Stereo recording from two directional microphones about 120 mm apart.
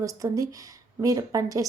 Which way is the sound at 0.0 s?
30° right (ahead or behind).